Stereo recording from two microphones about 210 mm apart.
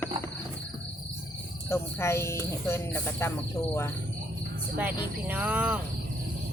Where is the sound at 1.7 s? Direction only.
10° left (ahead or behind).